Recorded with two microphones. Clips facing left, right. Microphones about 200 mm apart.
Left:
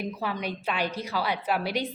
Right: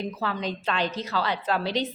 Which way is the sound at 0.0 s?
15° left (ahead or behind).